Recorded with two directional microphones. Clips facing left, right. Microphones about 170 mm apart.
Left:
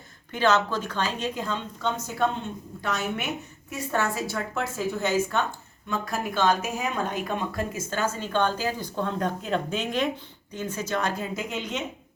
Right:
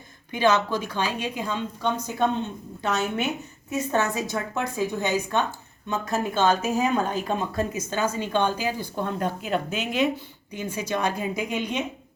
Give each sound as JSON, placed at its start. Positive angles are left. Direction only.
{"t": 0.3, "sound": "a woman's voice", "side_deg": -15}
{"t": 3.7, "sound": "a woman's voice", "side_deg": -20}
{"t": 7.7, "sound": "a woman's voice", "side_deg": -15}